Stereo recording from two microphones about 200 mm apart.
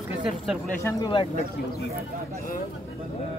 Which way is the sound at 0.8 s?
25° left (ahead or behind).